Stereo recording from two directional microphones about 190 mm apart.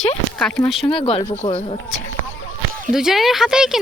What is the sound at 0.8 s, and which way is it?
Speech, 30° left (ahead or behind).